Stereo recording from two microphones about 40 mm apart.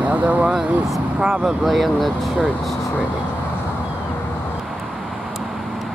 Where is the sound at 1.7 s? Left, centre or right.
Centre.